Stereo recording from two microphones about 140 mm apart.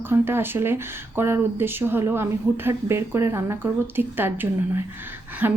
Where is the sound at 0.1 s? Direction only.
15° right (ahead or behind).